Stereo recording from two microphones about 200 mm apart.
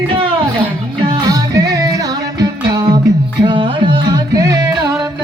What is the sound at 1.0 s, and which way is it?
Music, 20° right (ahead or behind).